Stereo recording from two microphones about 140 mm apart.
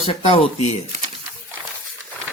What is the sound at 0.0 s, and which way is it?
Speech, 40° left (ahead or behind).